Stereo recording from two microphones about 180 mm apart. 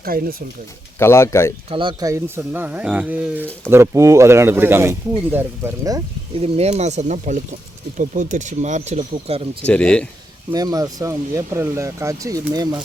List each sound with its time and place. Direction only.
0.0 s speech: 55° right (ahead or behind)
0.9 s speech: 15° left (ahead or behind)
1.7 s speech: 25° right (ahead or behind)
6.4 s speech: 35° right (ahead or behind)
9.6 s speech: 5° left (ahead or behind)
10.5 s speech: 20° right (ahead or behind)